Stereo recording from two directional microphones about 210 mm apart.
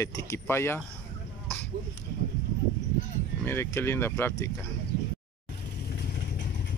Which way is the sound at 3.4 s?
10° left (ahead or behind).